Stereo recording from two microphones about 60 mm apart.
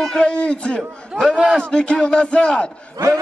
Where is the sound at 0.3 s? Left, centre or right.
Left.